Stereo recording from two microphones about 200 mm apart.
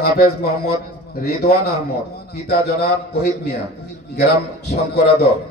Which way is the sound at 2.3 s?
50° left (ahead or behind).